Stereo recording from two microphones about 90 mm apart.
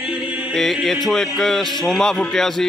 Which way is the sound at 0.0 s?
15° right (ahead or behind).